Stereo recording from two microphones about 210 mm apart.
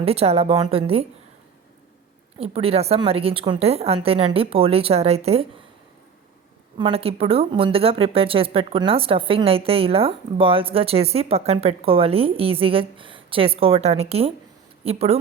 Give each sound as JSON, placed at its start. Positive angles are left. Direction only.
{"t": 0.0, "sound": "a woman's voice", "side_deg": -30}
{"t": 2.4, "sound": "a woman's voice", "side_deg": -25}
{"t": 6.7, "sound": "a woman's voice", "side_deg": -25}